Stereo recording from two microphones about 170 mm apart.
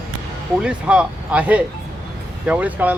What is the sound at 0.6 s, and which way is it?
Speech, 5° right (ahead or behind).